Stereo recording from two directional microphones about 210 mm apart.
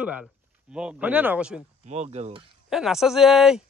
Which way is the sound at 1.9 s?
30° right (ahead or behind).